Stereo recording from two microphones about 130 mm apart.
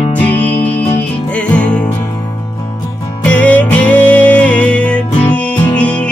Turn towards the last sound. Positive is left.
turn(degrees=10)  # may be behind; listen again after turning